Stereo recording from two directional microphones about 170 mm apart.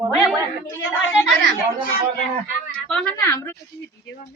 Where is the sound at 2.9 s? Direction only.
10° left (ahead or behind).